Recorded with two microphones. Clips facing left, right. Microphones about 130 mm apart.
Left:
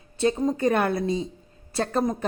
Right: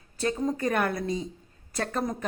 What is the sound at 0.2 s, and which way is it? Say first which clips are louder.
A woman's voice: left 5 dB; 25° left (ahead or behind).